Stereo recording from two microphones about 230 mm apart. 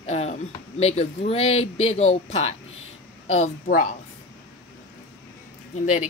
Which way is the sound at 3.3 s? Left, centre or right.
Left.